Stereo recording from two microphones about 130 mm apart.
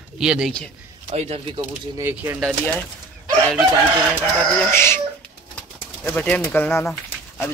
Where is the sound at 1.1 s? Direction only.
55° right (ahead or behind).